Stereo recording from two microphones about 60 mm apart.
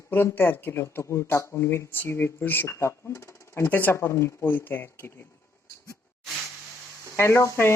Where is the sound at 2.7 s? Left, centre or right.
Left.